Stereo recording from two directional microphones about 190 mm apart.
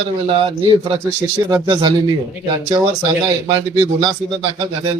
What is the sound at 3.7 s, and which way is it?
Speech, 25° right (ahead or behind).